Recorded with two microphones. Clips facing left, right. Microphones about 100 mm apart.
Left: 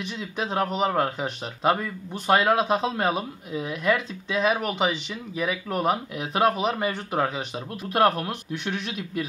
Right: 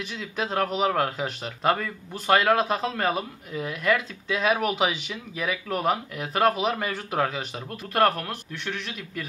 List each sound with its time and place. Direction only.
0.1 s speech: centre (ahead or behind)
8.5 s speech: 25° left (ahead or behind)